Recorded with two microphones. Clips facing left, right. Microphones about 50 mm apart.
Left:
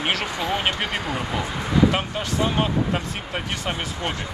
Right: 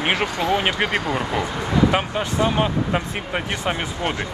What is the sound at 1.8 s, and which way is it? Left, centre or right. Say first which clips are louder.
Speech: right 3 dB; centre.